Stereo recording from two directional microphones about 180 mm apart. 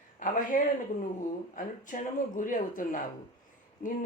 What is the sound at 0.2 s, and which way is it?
Speech, 45° left (ahead or behind).